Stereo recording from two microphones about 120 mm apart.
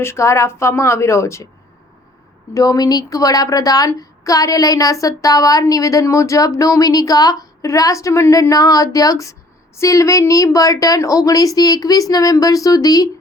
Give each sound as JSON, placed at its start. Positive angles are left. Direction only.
{"t": 0.0, "sound": "a woman's voice", "side_deg": 25}
{"t": 2.5, "sound": "a woman's voice", "side_deg": 30}